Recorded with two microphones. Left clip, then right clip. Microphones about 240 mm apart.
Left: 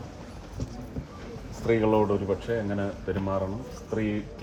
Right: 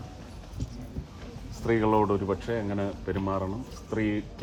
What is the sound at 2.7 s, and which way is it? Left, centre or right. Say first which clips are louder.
Speech: left 1 dB; right.